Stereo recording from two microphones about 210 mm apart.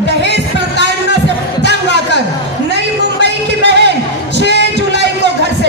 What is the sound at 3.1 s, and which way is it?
Music, 55° right (ahead or behind).